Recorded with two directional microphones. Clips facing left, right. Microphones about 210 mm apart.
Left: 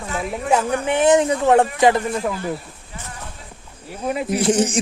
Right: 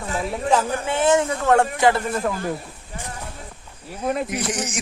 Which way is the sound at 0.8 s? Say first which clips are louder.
Left 6 dB; 15° left (ahead or behind).